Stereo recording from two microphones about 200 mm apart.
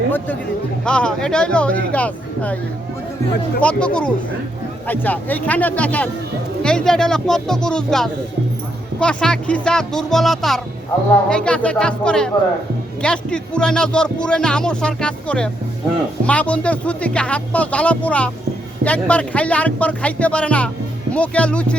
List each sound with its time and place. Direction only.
0.9 s speech: 5° left (ahead or behind)
3.6 s speech: 5° left (ahead or behind)